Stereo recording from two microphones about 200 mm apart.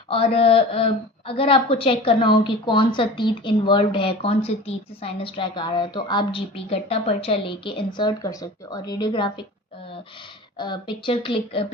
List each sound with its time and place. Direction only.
0.1 s a woman's voice: 30° left (ahead or behind)
10.6 s a woman's voice: 20° left (ahead or behind)